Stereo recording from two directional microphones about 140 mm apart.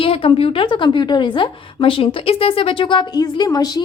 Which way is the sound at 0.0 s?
40° left (ahead or behind).